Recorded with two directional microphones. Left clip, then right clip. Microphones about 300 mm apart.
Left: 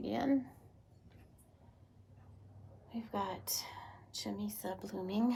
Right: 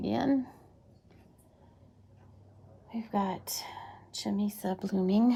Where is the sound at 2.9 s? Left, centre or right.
Right.